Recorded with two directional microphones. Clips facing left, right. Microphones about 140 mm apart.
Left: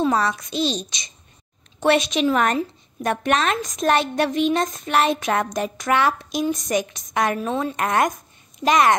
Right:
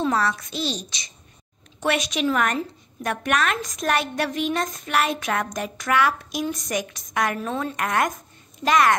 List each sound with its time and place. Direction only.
0.0 s a woman's voice: 15° left (ahead or behind)